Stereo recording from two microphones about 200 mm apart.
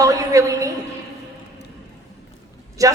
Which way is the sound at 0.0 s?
15° right (ahead or behind).